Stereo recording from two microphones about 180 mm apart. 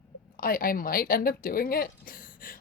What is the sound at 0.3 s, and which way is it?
A woman's voice, 55° left (ahead or behind).